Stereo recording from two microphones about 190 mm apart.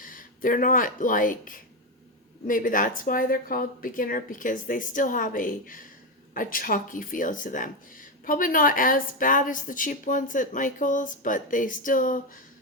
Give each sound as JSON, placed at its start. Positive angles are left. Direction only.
{"t": 0.0, "sound": "speech", "side_deg": 45}